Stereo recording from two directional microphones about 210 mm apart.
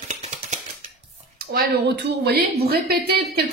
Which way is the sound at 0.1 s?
35° right (ahead or behind).